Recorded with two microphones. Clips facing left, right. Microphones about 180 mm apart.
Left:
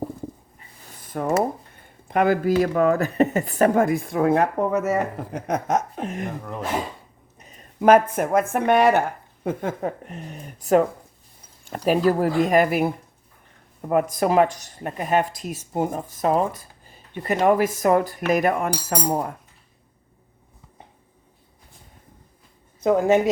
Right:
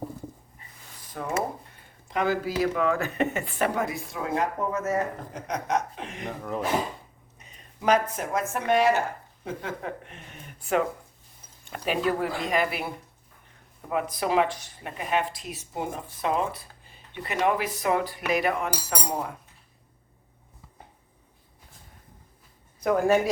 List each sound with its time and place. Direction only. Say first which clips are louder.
1.1 s speech: left 7 dB; 50° left (ahead or behind)
6.4 s speech: right 1 dB; centre (ahead or behind)
7.3 s speech: left 13 dB; 45° left (ahead or behind)
22.8 s speech: left 4 dB; 20° left (ahead or behind)